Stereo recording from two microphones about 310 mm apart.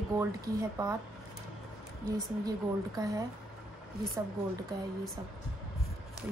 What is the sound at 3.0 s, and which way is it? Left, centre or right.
Speech, centre.